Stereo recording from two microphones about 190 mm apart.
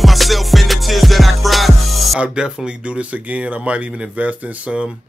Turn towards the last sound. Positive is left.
turn(degrees=-5)  # may be behind; listen again after turning